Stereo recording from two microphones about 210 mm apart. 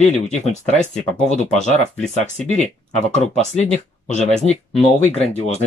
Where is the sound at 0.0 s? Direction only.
35° left (ahead or behind).